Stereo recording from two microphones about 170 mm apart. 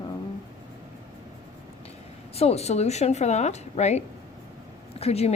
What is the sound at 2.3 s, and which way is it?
A woman's voice, 35° left (ahead or behind).